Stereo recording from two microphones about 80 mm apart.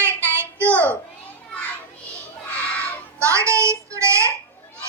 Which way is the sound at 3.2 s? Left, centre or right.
Right.